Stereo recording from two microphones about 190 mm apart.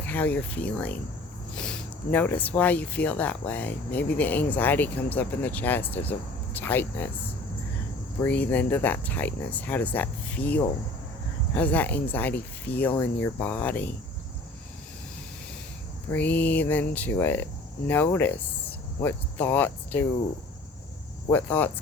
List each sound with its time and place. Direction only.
0.0 s speech: 10° left (ahead or behind)
8.2 s speech: 10° left (ahead or behind)
16.1 s speech: 10° left (ahead or behind)
21.2 s speech: 10° left (ahead or behind)